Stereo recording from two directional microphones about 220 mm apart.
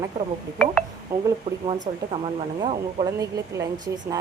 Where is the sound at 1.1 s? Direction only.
10° right (ahead or behind).